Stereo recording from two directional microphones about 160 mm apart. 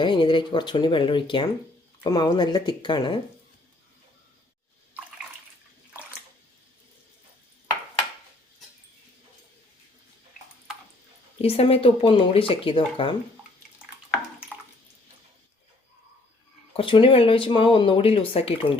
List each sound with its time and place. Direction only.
0.0 s speech: 30° left (ahead or behind)
11.3 s speech: 40° left (ahead or behind)
16.7 s speech: 30° left (ahead or behind)